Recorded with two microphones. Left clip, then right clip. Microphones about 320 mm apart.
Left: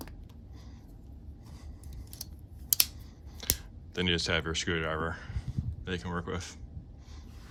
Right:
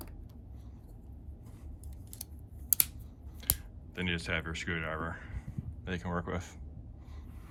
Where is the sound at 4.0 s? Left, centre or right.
Centre.